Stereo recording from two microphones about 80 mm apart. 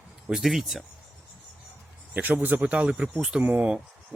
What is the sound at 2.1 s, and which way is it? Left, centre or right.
Speech, right.